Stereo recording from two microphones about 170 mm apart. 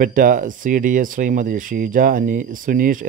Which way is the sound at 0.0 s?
50° right (ahead or behind).